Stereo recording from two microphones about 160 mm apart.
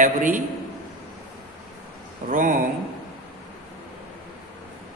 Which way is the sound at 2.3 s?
55° right (ahead or behind).